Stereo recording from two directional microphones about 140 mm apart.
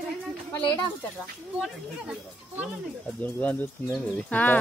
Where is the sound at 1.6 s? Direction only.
5° right (ahead or behind).